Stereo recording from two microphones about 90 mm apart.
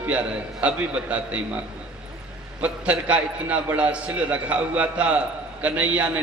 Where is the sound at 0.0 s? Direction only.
15° right (ahead or behind).